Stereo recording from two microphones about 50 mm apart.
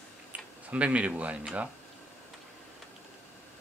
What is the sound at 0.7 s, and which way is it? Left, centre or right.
Speech, right.